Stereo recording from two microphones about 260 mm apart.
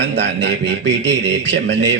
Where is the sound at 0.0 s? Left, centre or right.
Right.